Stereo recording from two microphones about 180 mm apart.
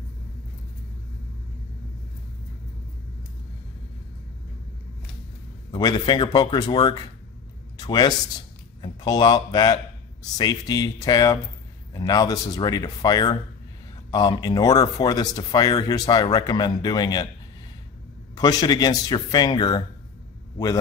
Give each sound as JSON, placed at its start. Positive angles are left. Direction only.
{"t": 5.7, "sound": "speech", "side_deg": 25}
{"t": 18.3, "sound": "a man's voice", "side_deg": 20}